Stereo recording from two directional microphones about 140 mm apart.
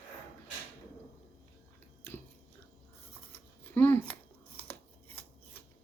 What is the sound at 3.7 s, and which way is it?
Scissors, 15° left (ahead or behind).